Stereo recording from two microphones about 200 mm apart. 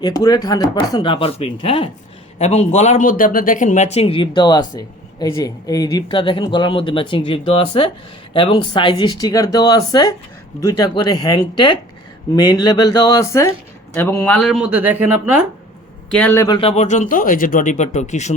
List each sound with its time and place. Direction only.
0.0 s speech: 20° left (ahead or behind)
14.3 s speech: centre (ahead or behind)
16.1 s speech: 10° left (ahead or behind)
16.6 s speech: 30° left (ahead or behind)